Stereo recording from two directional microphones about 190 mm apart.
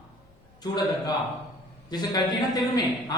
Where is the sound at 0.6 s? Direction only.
20° left (ahead or behind).